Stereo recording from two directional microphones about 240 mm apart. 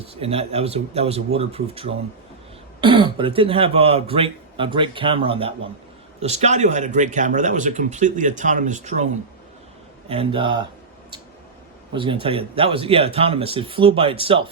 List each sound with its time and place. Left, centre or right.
0.0 s speech: right
10.1 s speech: right
11.9 s speech: right